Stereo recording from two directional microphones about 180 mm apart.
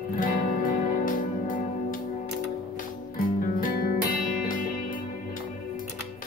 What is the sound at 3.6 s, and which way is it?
Music, 55° left (ahead or behind).